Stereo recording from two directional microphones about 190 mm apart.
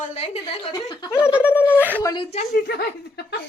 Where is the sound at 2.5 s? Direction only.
60° left (ahead or behind).